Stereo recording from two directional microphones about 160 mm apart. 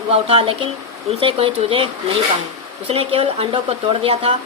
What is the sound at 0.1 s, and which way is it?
Speech, 35° right (ahead or behind).